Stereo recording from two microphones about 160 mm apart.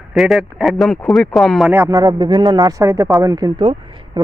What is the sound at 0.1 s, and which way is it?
Speech, centre (ahead or behind).